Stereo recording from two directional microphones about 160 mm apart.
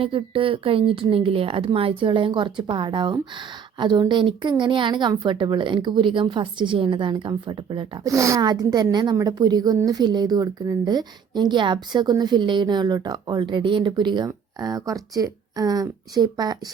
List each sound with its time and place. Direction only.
0.0 s speech: 35° right (ahead or behind)